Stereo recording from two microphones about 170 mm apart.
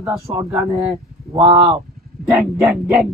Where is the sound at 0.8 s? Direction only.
5° right (ahead or behind).